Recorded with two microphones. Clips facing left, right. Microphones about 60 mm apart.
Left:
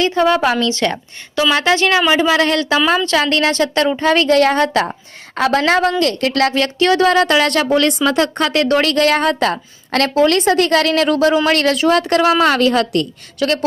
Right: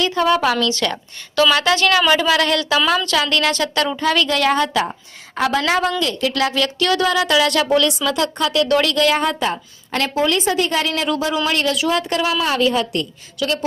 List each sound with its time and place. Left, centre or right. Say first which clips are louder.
0.0 s a woman's voice: left 3 dB; left
13.4 s speech: left 4 dB; left